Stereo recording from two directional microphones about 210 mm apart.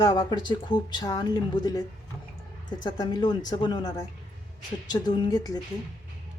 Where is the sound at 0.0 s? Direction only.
20° left (ahead or behind).